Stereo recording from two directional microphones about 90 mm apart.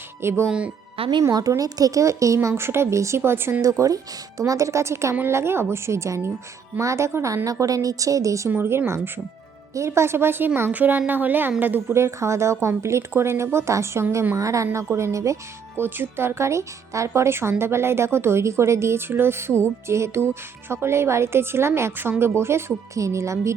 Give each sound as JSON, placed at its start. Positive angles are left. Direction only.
{"t": 0.2, "sound": "speech", "side_deg": -30}
{"t": 0.4, "sound": "speech", "side_deg": -10}
{"t": 0.9, "sound": "speech", "side_deg": -90}
{"t": 1.3, "sound": "a woman's voice", "side_deg": -45}
{"t": 3.6, "sound": "a woman's voice", "side_deg": -35}
{"t": 8.4, "sound": "a woman's voice", "side_deg": -25}